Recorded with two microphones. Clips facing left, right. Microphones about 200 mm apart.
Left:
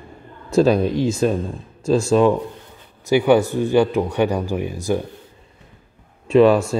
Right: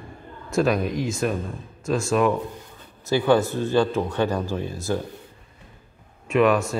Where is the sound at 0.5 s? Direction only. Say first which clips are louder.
Left 6 dB; 30° left (ahead or behind).